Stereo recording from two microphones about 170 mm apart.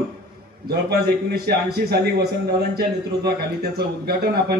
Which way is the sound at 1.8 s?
70° right (ahead or behind).